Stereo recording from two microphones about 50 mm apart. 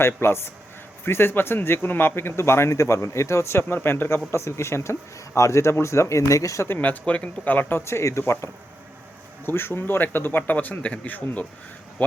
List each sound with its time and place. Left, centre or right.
0.0 s speech: left
4.3 s speech: left
6.7 s speech: left
7.8 s speech: left
9.5 s speech: left